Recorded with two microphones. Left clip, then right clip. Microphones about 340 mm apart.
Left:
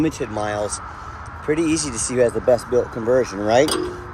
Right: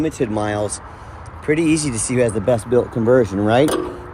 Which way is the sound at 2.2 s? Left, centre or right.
Right.